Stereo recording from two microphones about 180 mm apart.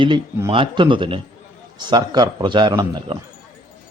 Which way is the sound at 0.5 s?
30° right (ahead or behind).